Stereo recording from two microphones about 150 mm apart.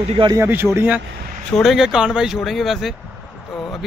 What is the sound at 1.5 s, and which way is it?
Speech, centre (ahead or behind).